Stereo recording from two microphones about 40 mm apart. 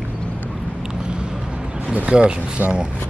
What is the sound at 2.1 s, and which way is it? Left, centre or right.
Speech, right.